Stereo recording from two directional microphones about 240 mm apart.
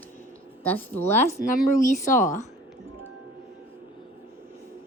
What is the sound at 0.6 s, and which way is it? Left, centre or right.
Speech, centre.